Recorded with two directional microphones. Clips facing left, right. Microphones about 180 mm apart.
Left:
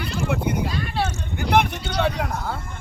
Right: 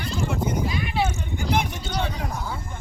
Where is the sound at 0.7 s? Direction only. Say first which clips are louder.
Even; 15° right (ahead or behind).